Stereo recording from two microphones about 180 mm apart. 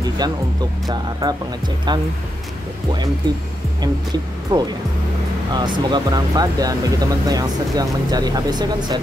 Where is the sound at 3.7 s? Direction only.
25° right (ahead or behind).